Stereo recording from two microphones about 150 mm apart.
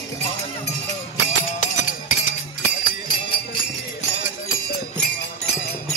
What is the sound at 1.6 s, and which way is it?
Music, 60° left (ahead or behind).